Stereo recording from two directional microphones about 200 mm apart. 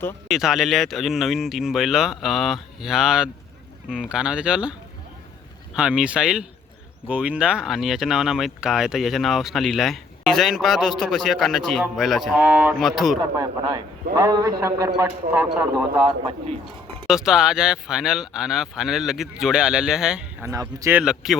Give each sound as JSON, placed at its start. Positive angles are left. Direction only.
{"t": 0.3, "sound": "speech", "side_deg": 0}
{"t": 5.7, "sound": "speech", "side_deg": -5}
{"t": 14.2, "sound": "speech", "side_deg": -15}
{"t": 16.0, "sound": "speech", "side_deg": -25}
{"t": 17.1, "sound": "speech", "side_deg": -5}
{"t": 20.5, "sound": "speech", "side_deg": -15}
{"t": 21.0, "sound": "speech", "side_deg": -5}